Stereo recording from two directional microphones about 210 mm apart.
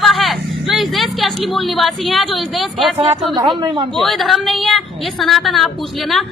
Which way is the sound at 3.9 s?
Centre (ahead or behind).